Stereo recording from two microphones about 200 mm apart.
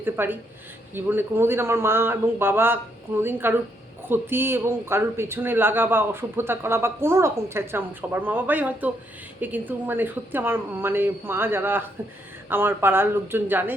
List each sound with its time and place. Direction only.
0.0 s speech: 10° right (ahead or behind)